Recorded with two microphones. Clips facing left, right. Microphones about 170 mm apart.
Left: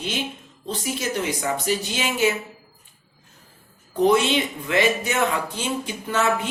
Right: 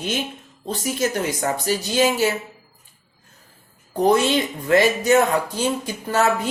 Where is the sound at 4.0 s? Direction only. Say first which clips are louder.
Right 1 dB; 40° right (ahead or behind).